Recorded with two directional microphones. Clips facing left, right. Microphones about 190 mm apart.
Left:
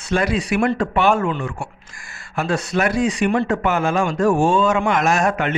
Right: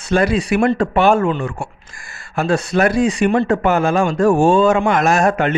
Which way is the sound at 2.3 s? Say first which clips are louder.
Right 4 dB; 30° right (ahead or behind).